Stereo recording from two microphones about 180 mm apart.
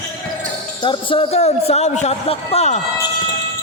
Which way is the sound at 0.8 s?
25° left (ahead or behind).